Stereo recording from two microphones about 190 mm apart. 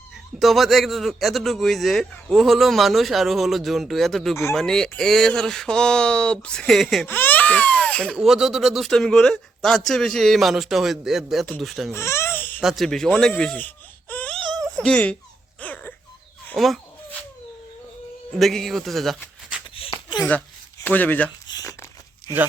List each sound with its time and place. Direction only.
0.3 s speech: centre (ahead or behind)
11.9 s baby cry: 15° left (ahead or behind)
12.6 s speech: centre (ahead or behind)
15.6 s a sound: 10° left (ahead or behind)
16.5 s speech: centre (ahead or behind)
18.3 s speech: centre (ahead or behind)
19.7 s a sound: 25° left (ahead or behind)
20.8 s speech: 10° left (ahead or behind)
21.4 s crumpling: 20° left (ahead or behind)